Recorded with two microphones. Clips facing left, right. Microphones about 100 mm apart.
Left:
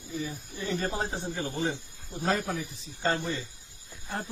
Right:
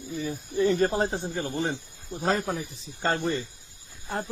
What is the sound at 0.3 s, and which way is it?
Speech, 55° right (ahead or behind).